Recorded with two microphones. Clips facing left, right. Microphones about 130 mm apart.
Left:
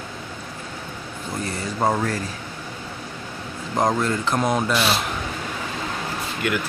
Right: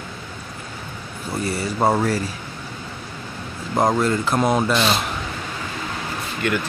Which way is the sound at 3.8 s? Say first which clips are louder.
Right 2 dB; 5° right (ahead or behind).